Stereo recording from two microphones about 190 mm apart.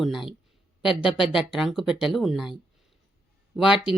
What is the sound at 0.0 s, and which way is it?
A woman's voice, centre (ahead or behind).